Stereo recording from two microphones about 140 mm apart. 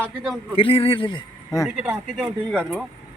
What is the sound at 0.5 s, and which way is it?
Speech, 40° left (ahead or behind).